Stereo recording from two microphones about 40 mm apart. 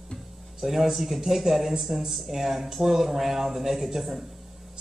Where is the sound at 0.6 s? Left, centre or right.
Centre.